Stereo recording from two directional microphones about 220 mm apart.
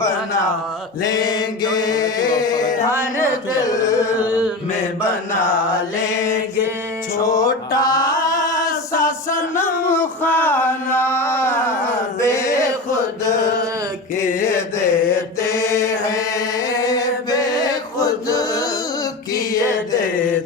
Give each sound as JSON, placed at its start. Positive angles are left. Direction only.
{"t": 1.0, "sound": "mantra", "side_deg": 15}
{"t": 3.5, "sound": "carnatic music", "side_deg": 15}
{"t": 7.3, "sound": "mantra", "side_deg": 15}
{"t": 8.2, "sound": "a sound", "side_deg": 15}
{"t": 14.2, "sound": "a sound", "side_deg": 10}
{"t": 15.4, "sound": "mantra", "side_deg": 15}
{"t": 16.8, "sound": "chant", "side_deg": 15}